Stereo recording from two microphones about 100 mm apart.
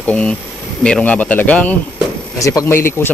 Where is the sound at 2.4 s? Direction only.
30° left (ahead or behind).